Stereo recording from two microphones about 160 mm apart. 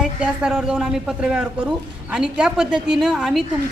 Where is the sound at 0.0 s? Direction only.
5° right (ahead or behind).